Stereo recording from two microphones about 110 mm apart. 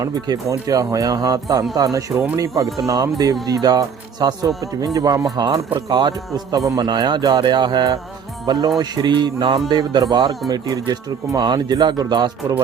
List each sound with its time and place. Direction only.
0.0 s speech: 35° right (ahead or behind)